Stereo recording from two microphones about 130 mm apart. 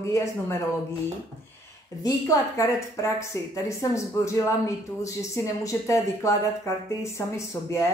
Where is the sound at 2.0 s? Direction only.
25° left (ahead or behind).